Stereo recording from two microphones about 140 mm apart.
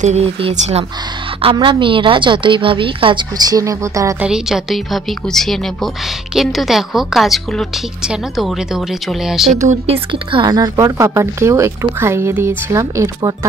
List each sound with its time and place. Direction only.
0.0 s a woman's voice: 50° right (ahead or behind); by 4.1 s 25° right (ahead or behind)
4.2 s a woman's voice: 5° right (ahead or behind)
9.5 s speech: 55° right (ahead or behind)
10.1 s speech: 35° right (ahead or behind)